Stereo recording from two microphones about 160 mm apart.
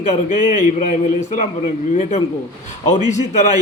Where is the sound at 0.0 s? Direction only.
50° left (ahead or behind).